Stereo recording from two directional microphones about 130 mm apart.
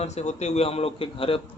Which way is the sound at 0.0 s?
60° left (ahead or behind).